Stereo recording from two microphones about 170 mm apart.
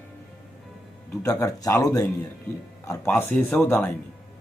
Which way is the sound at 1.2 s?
15° left (ahead or behind).